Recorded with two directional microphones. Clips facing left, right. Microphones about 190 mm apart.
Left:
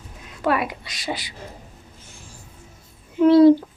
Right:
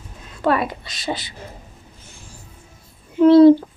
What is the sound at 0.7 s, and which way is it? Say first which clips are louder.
Speech: right 3 dB; 10° left (ahead or behind).